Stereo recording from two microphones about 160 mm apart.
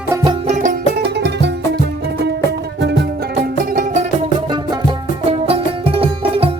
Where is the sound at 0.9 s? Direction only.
90° right.